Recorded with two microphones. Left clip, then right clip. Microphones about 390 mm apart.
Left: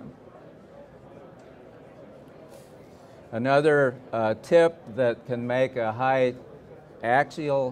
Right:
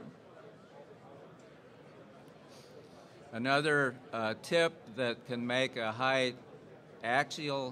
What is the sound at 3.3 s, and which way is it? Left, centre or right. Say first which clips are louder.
Speech: left 9 dB; left.